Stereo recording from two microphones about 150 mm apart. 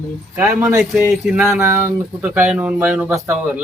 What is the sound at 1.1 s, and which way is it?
A man's voice, 5° right (ahead or behind).